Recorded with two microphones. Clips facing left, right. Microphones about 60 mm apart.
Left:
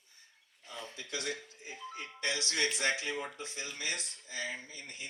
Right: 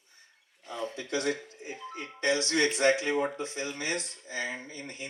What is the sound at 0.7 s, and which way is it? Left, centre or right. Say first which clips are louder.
Speech: right 9 dB; right.